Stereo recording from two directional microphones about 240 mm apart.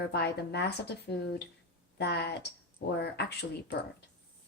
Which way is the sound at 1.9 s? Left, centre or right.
Left.